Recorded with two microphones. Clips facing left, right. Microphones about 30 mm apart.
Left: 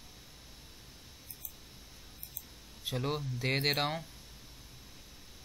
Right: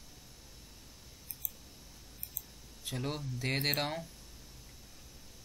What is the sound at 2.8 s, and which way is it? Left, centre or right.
Speech, centre.